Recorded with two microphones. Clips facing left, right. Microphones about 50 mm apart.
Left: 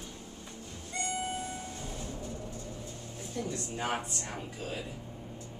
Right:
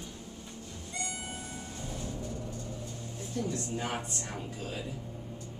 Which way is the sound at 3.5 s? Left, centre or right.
Centre.